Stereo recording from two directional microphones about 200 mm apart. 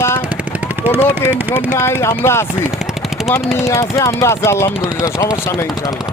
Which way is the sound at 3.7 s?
15° left (ahead or behind).